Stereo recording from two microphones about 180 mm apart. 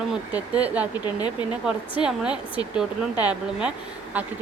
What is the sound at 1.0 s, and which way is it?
Speech, 25° left (ahead or behind).